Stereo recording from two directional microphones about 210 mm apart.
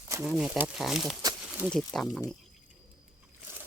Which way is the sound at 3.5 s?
10° right (ahead or behind).